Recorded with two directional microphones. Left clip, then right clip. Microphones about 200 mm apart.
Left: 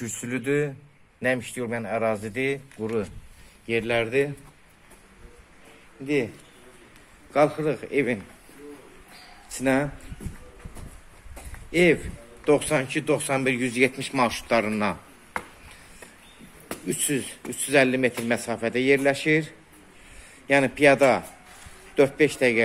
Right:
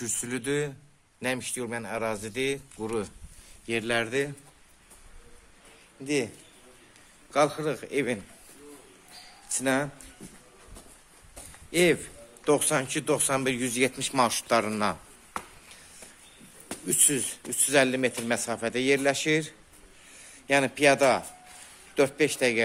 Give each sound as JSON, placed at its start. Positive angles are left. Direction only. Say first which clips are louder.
{"t": 0.0, "sound": "a man's voice", "louder": "left 2 dB", "side_deg": -15}
{"t": 7.3, "sound": "speech", "louder": "left 3 dB", "side_deg": -10}
{"t": 9.6, "sound": "speech", "louder": "left 3 dB", "side_deg": -10}
{"t": 11.7, "sound": "a man's voice", "louder": "left 3 dB", "side_deg": -15}